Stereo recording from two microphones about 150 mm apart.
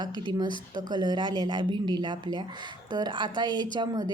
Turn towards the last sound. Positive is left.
turn(degrees=-30)  # may be behind; listen again after turning